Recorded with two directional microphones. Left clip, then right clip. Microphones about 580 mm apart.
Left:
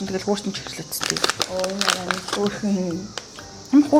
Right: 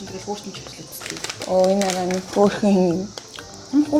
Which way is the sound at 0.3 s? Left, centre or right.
Left.